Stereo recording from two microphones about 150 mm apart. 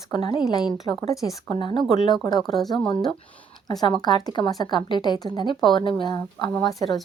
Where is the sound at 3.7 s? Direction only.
25° left (ahead or behind).